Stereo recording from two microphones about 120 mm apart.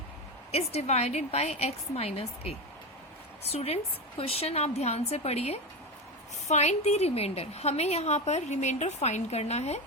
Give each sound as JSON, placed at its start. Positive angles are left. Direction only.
{"t": 0.5, "sound": "a woman's voice", "side_deg": 60}